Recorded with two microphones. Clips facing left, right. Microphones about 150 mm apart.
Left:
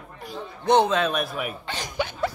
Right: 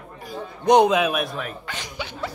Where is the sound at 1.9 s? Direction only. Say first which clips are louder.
Left 6 dB; 50° left (ahead or behind).